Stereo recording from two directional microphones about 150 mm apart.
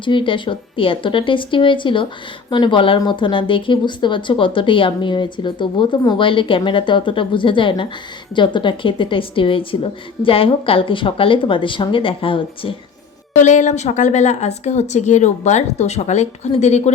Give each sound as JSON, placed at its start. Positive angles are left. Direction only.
{"t": 0.0, "sound": "speech", "side_deg": 35}
{"t": 13.3, "sound": "a woman's voice", "side_deg": 55}